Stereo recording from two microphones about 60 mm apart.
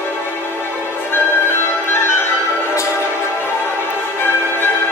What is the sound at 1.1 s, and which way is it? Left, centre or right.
Music, left.